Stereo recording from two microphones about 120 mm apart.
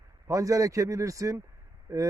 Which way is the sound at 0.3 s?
25° right (ahead or behind).